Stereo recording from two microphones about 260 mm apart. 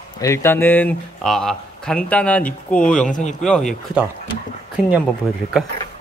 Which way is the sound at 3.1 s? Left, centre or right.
Left.